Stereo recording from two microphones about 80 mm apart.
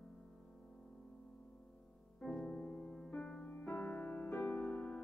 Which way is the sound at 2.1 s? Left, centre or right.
Centre.